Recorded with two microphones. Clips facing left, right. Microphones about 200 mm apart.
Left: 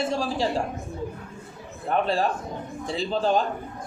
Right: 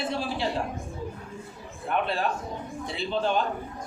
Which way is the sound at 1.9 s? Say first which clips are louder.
Left 4 dB; 35° left (ahead or behind).